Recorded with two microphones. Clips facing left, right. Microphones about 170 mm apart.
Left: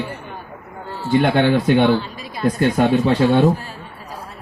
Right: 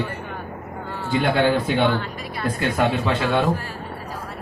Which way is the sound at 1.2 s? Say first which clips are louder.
Left 2 dB; 60° left (ahead or behind).